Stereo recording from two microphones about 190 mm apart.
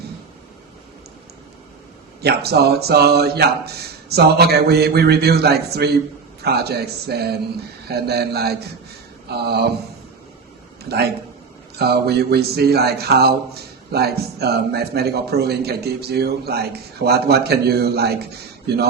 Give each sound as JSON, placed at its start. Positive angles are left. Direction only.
{"t": 2.2, "sound": "speech", "side_deg": -55}
{"t": 10.8, "sound": "speech", "side_deg": -60}